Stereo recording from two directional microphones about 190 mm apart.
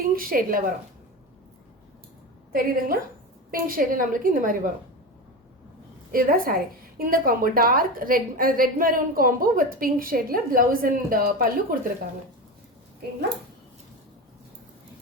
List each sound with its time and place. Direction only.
0.0 s speech: 50° right (ahead or behind)
2.5 s a woman's voice: 50° right (ahead or behind)
6.1 s a woman's voice: 50° right (ahead or behind)